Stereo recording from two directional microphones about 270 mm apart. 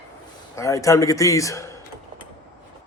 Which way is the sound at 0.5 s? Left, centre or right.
Centre.